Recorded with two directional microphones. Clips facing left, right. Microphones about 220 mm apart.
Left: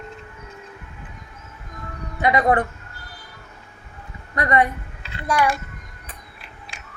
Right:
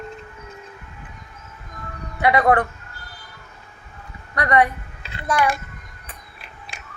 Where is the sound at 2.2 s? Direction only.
20° left (ahead or behind).